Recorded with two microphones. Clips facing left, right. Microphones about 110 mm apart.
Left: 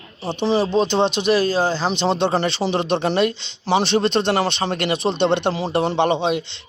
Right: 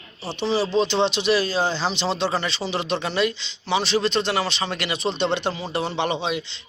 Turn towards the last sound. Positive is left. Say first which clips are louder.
# left 6 dB
turn(degrees=55)  # may be behind; listen again after turning